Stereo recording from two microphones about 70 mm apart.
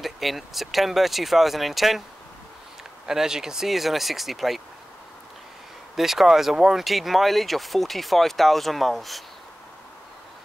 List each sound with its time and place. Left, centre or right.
0.0 s speech: centre
3.1 s speech: centre
5.9 s speech: centre